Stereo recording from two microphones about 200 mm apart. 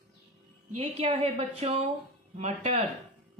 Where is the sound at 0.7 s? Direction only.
30° right (ahead or behind).